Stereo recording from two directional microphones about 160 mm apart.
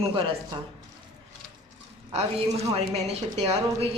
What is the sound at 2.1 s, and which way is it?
Speech, 40° right (ahead or behind).